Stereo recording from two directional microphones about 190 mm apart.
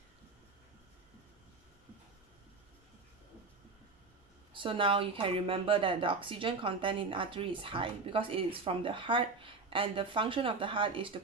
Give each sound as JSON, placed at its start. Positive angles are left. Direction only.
{"t": 4.6, "sound": "speech", "side_deg": -25}